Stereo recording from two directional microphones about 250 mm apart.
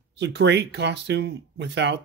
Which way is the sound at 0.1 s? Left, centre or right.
Right.